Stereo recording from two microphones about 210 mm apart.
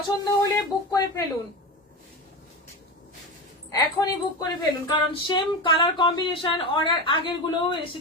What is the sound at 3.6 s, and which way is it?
Speech, 20° left (ahead or behind).